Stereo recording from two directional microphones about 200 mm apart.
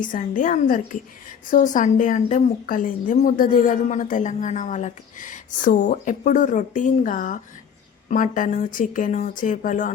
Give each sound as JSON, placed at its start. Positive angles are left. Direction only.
{"t": 0.0, "sound": "a woman's voice", "side_deg": 40}